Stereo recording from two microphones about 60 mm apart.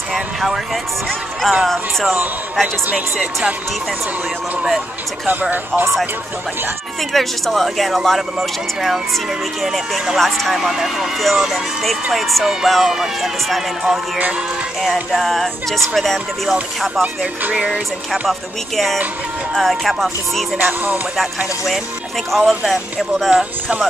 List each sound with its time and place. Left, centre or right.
0.1 s vehicle: centre
1.4 s speech: centre
4.6 s music: centre
5.3 s speech: right
7.1 s speech: centre
10.6 s speech: centre
15.1 s speech: centre
17.0 s music: right
19.5 s speech: centre
20.5 s speech: right
22.4 s music: centre
22.7 s speech: centre